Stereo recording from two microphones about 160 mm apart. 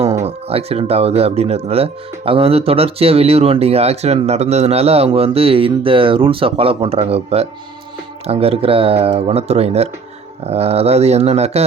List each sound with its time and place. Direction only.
0.2 s speech: 40° right (ahead or behind)